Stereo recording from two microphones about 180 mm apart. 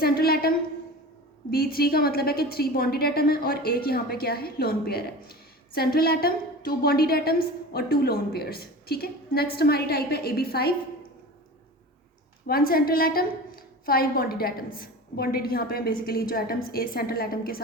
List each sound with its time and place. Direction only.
0.0 s a sound: 55° left (ahead or behind)
1.5 s a woman's voice: 55° left (ahead or behind)
12.5 s a woman's voice: 55° left (ahead or behind)